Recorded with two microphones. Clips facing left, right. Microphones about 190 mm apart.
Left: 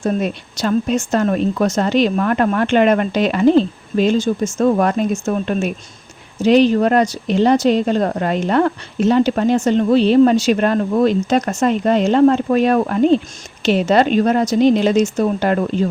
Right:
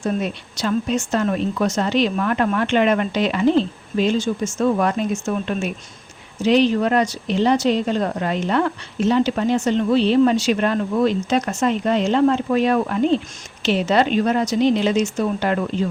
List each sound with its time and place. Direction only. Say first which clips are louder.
0.0 s speech: left 4 dB; 45° left (ahead or behind)